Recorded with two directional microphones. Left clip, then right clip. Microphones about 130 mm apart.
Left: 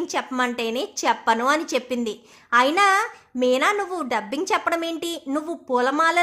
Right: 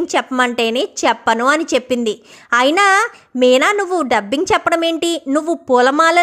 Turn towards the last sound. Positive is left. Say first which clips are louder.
# right 8 dB
turn(degrees=-50)  # may be behind; listen again after turning